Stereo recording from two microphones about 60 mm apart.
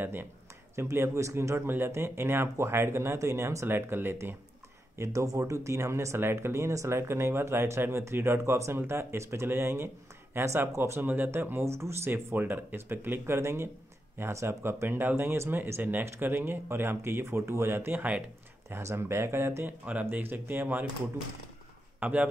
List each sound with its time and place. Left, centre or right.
0.0 s speech: right
0.7 s speech: right
4.9 s speech: right
11.6 s speech: right
12.4 s speech: right
13.4 s speech: right
18.8 s speech: right
19.8 s speech: right
22.0 s speech: right